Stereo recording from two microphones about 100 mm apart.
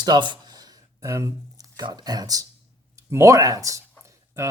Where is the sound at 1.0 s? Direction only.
30° right (ahead or behind).